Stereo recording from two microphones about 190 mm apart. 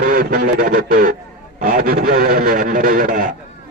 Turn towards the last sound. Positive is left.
turn(degrees=-45)  # may be behind; listen again after turning